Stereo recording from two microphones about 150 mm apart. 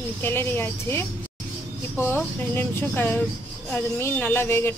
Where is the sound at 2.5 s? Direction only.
15° left (ahead or behind).